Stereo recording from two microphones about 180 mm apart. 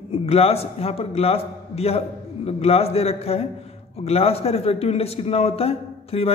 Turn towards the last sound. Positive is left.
turn(degrees=35)  # may be behind; listen again after turning